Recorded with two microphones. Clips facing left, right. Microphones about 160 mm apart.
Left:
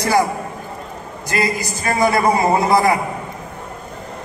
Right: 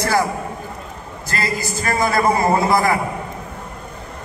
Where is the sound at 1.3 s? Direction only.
15° left (ahead or behind).